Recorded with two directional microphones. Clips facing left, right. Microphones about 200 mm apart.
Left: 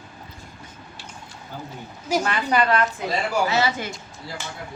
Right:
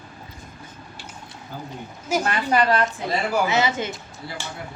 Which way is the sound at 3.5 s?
20° right (ahead or behind).